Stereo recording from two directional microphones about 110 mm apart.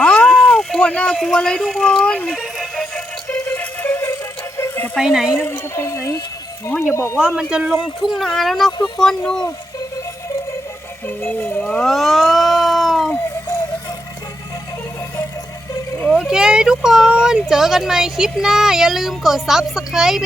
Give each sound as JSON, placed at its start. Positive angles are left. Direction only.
{"t": 0.0, "sound": "cat", "side_deg": 10}
{"t": 1.2, "sound": "speech", "side_deg": 5}
{"t": 3.4, "sound": "synthetic singing", "side_deg": 20}
{"t": 4.9, "sound": "speech", "side_deg": -5}
{"t": 5.4, "sound": "speech", "side_deg": 25}
{"t": 7.2, "sound": "speech", "side_deg": -10}
{"t": 11.2, "sound": "speech", "side_deg": 15}
{"t": 11.8, "sound": "cat", "side_deg": 0}
{"t": 16.1, "sound": "speech", "side_deg": -5}